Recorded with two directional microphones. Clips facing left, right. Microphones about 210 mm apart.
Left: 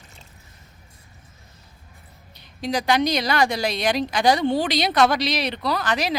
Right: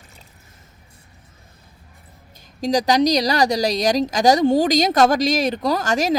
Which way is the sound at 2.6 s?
40° right (ahead or behind).